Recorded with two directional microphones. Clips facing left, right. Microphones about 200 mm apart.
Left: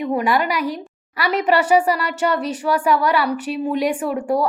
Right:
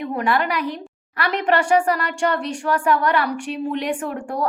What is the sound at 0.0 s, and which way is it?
A woman's voice, 10° left (ahead or behind).